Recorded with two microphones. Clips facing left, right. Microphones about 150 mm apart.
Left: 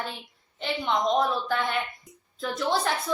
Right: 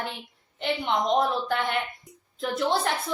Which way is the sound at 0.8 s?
20° right (ahead or behind).